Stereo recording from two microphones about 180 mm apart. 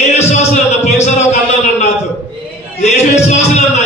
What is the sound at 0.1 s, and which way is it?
Music, 40° left (ahead or behind).